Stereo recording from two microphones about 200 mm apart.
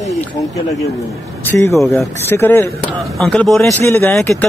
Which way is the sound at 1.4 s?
15° left (ahead or behind).